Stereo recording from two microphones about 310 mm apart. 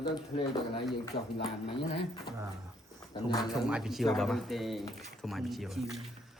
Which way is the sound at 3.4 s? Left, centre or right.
Centre.